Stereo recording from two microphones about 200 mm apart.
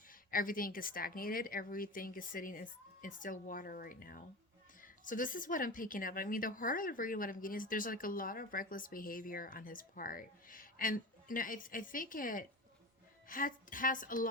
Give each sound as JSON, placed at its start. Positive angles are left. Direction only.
{"t": 0.1, "sound": "a woman's voice", "side_deg": 45}